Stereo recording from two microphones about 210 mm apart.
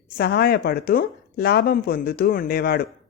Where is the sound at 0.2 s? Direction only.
50° left (ahead or behind).